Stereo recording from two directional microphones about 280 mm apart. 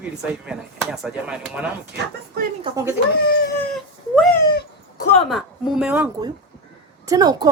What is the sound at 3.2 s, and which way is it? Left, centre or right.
Speech, left.